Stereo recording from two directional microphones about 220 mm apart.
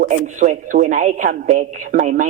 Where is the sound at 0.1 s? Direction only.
35° right (ahead or behind).